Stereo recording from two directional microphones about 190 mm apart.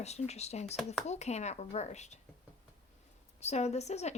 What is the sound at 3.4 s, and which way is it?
Speech, 35° left (ahead or behind).